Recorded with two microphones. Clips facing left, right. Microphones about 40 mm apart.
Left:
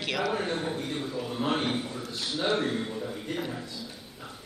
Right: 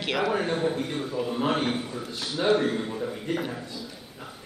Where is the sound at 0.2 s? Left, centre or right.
Centre.